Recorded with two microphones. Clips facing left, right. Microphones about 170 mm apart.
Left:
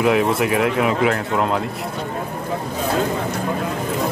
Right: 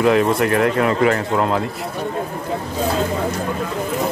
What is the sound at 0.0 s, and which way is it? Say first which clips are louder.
A man's voice: right 2 dB; 5° left (ahead or behind).